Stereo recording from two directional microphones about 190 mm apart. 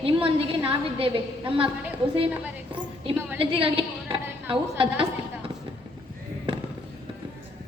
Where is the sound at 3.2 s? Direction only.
10° right (ahead or behind).